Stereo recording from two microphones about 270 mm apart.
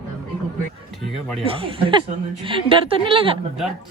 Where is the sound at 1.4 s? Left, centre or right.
Centre.